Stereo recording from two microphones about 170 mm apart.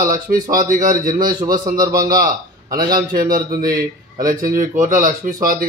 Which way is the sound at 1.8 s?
20° right (ahead or behind).